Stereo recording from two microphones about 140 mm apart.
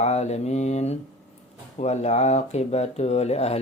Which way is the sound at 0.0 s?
55° left (ahead or behind).